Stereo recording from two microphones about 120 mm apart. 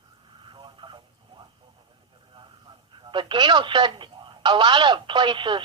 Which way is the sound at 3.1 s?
45° right (ahead or behind).